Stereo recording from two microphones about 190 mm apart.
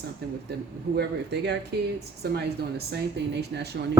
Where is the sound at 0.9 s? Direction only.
60° right (ahead or behind).